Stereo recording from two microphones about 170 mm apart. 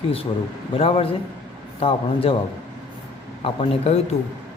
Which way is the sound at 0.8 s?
35° left (ahead or behind).